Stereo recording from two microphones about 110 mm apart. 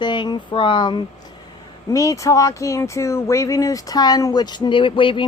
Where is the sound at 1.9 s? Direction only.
30° left (ahead or behind).